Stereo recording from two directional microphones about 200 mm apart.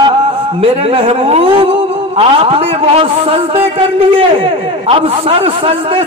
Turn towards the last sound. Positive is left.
turn(degrees=-25)  # may be behind; listen again after turning